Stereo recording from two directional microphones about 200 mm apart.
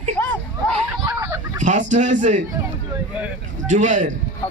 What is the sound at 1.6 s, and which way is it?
Speech, 40° right (ahead or behind).